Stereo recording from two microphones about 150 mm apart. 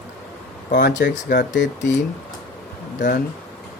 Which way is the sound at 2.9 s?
65° left (ahead or behind).